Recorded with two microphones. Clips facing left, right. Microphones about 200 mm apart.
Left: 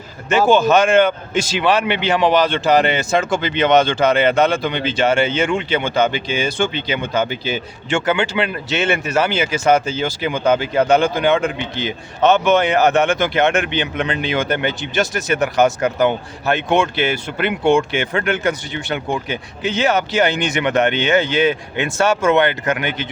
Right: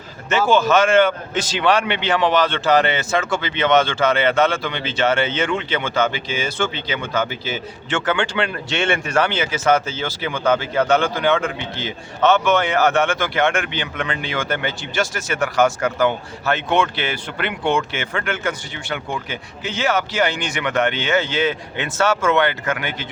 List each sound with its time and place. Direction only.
0.3 s a man's voice: 15° left (ahead or behind)